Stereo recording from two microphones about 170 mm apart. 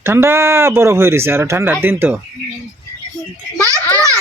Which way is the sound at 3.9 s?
20° right (ahead or behind).